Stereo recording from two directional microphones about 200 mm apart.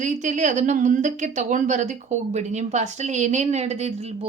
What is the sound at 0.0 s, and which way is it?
A woman's voice, 35° right (ahead or behind).